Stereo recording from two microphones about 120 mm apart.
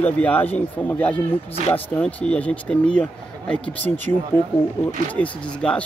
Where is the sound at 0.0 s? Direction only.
15° left (ahead or behind).